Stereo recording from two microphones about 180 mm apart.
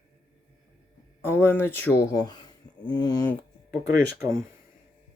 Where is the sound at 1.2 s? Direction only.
15° left (ahead or behind).